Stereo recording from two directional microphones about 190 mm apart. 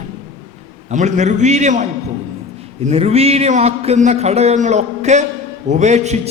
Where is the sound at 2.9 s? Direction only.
35° right (ahead or behind).